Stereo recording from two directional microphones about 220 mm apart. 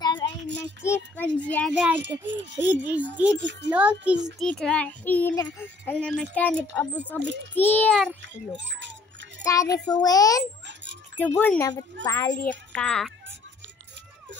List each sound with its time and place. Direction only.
0.0 s child singing: 20° left (ahead or behind)
0.6 s speech: 10° left (ahead or behind)
1.7 s a child's voice: 5° right (ahead or behind)
8.2 s a child's voice: 55° right (ahead or behind)
9.4 s a child's voice: 15° left (ahead or behind)
10.7 s a sound: 55° right (ahead or behind)
11.1 s a child's voice: 10° left (ahead or behind)